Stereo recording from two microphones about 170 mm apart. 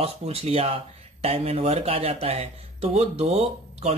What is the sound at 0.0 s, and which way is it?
Speech, 35° right (ahead or behind).